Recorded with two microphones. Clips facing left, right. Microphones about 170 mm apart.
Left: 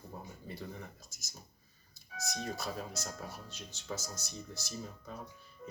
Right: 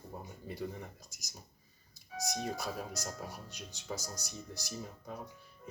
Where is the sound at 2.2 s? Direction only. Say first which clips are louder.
Right 2 dB; 15° right (ahead or behind).